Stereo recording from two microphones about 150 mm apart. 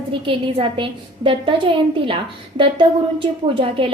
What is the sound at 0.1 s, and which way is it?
A woman's voice, 35° right (ahead or behind).